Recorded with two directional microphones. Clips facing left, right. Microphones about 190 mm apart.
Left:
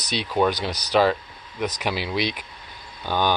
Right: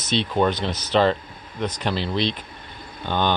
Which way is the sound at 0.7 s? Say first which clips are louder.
Right 2 dB; 40° left (ahead or behind).